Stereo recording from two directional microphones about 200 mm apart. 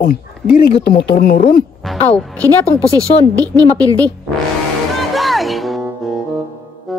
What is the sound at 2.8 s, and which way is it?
Speech, 15° right (ahead or behind).